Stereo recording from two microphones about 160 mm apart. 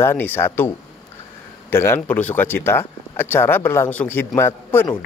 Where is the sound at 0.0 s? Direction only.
15° left (ahead or behind).